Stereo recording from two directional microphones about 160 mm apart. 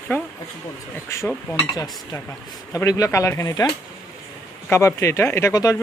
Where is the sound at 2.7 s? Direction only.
20° left (ahead or behind).